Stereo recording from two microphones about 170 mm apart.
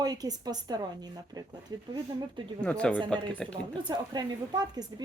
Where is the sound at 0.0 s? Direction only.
20° right (ahead or behind).